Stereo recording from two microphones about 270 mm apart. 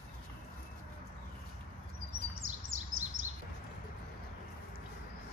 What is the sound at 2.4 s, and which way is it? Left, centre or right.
Bird, right.